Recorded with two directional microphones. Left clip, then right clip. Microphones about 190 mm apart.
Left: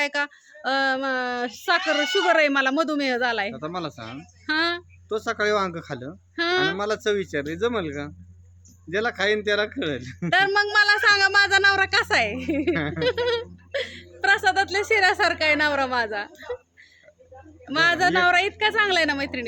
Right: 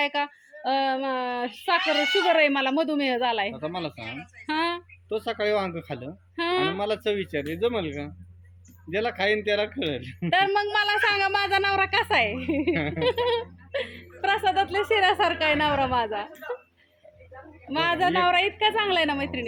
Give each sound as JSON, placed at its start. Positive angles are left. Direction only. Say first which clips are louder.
{"t": 0.0, "sound": "speech", "louder": "left 1 dB", "side_deg": 5}
{"t": 3.5, "sound": "a man's voice", "louder": "left 1 dB", "side_deg": 25}
{"t": 4.4, "sound": "speech", "louder": "left 3 dB", "side_deg": 5}
{"t": 5.0, "sound": "a man's voice", "louder": "left 2 dB", "side_deg": 25}
{"t": 6.3, "sound": "a sound", "louder": "left 3 dB", "side_deg": 5}
{"t": 6.7, "sound": "a man's voice", "louder": "left 2 dB", "side_deg": 25}
{"t": 10.2, "sound": "speech", "louder": "left 2 dB", "side_deg": 5}
{"t": 12.7, "sound": "speech", "louder": "left 1 dB", "side_deg": 30}
{"t": 13.0, "sound": "speech", "louder": "even", "side_deg": 5}
{"t": 17.7, "sound": "speech", "louder": "left 4 dB", "side_deg": 5}